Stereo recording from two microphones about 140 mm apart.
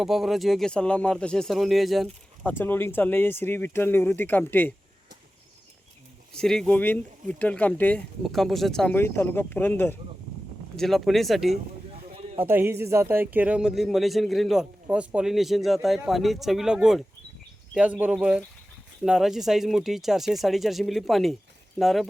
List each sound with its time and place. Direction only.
0.0 s speech: centre (ahead or behind)
2.4 s speech: 15° left (ahead or behind)
6.3 s speech: 5° left (ahead or behind)
9.0 s speech: 15° left (ahead or behind)
10.8 s speech: centre (ahead or behind)
12.4 s speech: 15° right (ahead or behind)